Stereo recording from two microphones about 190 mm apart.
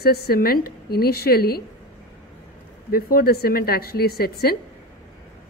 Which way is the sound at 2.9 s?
55° left (ahead or behind).